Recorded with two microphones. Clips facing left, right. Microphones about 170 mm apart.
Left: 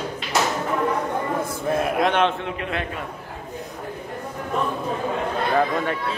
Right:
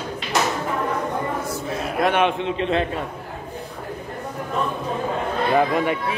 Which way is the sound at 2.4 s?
25° right (ahead or behind).